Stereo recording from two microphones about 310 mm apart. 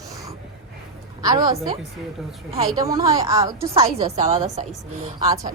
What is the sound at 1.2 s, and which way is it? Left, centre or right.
A woman's voice, centre.